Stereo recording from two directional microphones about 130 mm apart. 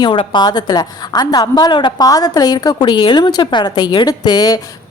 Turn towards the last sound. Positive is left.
turn(degrees=30)  # may be behind; listen again after turning